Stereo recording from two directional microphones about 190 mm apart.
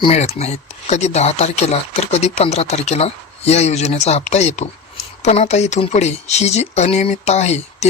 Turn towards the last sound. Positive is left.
turn(degrees=35)  # may be behind; listen again after turning